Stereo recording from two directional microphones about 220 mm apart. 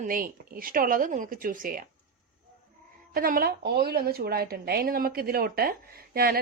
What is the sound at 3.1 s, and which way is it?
A woman's voice, 40° right (ahead or behind).